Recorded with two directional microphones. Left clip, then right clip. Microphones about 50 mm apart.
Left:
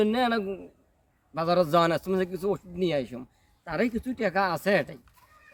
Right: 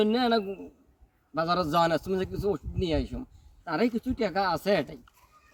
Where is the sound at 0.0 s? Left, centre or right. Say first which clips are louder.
Even; centre.